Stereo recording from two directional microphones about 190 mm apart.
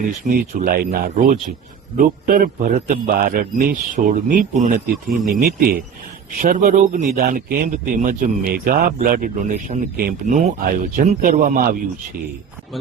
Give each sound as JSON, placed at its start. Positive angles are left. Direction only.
{"t": 0.3, "sound": "a man's voice", "side_deg": -50}